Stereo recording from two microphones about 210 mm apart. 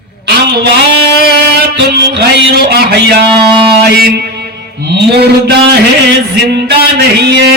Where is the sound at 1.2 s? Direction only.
50° right (ahead or behind).